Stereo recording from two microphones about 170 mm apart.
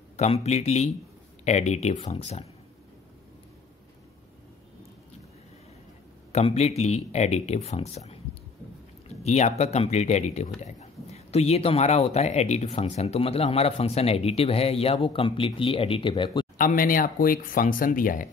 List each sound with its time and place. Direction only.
0.2 s speech: 40° left (ahead or behind)
6.3 s speech: 40° left (ahead or behind)
9.2 s speech: 40° left (ahead or behind)
16.5 s speech: 55° left (ahead or behind)